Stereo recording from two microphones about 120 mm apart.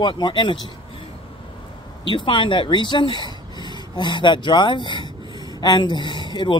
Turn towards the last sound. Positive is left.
turn(degrees=40)  # may be behind; listen again after turning